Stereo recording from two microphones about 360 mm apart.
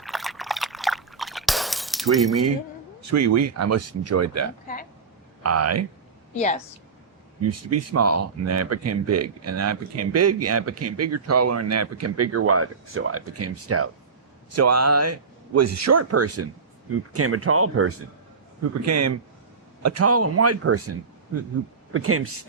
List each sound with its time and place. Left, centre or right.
0.0 s a sound: centre
3.1 s speech: right
6.3 s a woman's voice: centre
7.5 s speech: right
21.9 s speech: right